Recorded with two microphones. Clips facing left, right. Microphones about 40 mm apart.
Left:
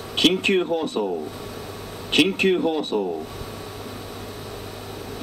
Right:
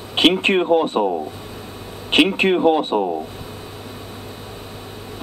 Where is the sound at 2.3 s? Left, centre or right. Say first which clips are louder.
Right 5 dB; right.